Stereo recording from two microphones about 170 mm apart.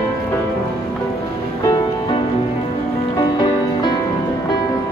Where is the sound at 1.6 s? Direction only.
25° left (ahead or behind).